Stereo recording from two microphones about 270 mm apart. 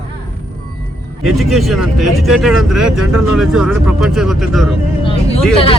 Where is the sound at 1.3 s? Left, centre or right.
Centre.